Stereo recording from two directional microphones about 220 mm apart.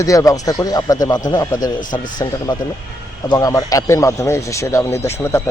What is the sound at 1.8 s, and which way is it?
Speech, 35° left (ahead or behind).